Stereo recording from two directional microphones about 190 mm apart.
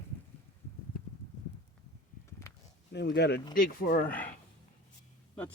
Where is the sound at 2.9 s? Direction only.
60° left (ahead or behind).